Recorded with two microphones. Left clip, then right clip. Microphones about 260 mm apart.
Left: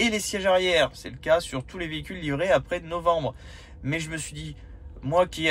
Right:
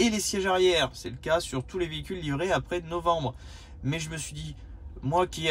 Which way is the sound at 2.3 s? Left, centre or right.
Right.